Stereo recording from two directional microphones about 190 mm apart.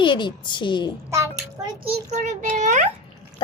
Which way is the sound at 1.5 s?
20° right (ahead or behind).